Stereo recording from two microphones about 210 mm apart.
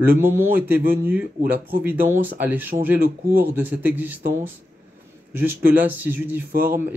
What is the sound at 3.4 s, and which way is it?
Speech, 10° right (ahead or behind).